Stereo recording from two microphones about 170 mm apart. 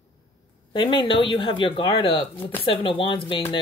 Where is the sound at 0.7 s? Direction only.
30° left (ahead or behind).